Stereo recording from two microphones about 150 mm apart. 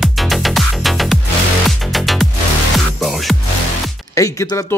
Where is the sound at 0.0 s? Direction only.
Centre (ahead or behind).